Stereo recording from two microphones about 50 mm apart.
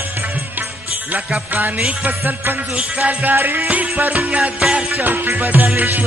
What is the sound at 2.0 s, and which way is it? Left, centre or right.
Music, right.